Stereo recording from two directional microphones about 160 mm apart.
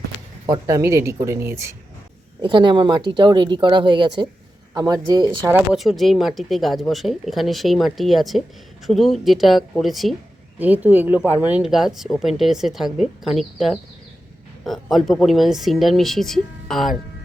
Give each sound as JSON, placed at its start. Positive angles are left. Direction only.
{"t": 0.4, "sound": "speech", "side_deg": -20}
{"t": 2.4, "sound": "speech", "side_deg": -30}
{"t": 5.7, "sound": "speech", "side_deg": 0}